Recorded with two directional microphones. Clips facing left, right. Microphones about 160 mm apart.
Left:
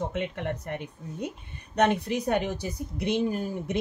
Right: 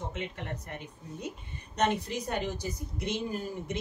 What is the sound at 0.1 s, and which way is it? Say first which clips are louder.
Speech: left 7 dB; 60° left (ahead or behind).